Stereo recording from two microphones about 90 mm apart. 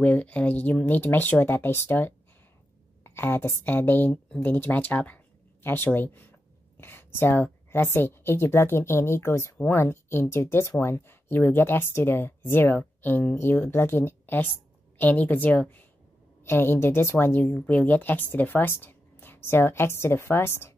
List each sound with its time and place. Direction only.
0.0 s a woman's voice: 15° left (ahead or behind)